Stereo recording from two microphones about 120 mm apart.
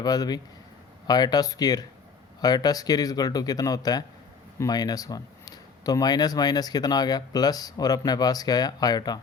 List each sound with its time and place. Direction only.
0.0 s speech: 35° left (ahead or behind)